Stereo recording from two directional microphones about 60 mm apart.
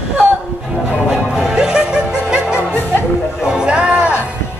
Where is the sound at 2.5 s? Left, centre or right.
Left.